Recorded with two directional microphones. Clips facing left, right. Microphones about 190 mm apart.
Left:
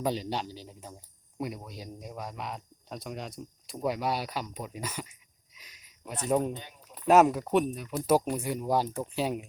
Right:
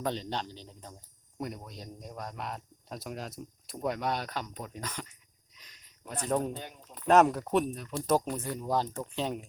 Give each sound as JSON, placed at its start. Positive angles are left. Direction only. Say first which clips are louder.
{"t": 0.0, "sound": "a man's voice", "louder": "left 3 dB", "side_deg": 10}
{"t": 5.5, "sound": "a sound", "louder": "left 2 dB", "side_deg": 10}
{"t": 7.1, "sound": "a man's voice", "louder": "left 2 dB", "side_deg": 5}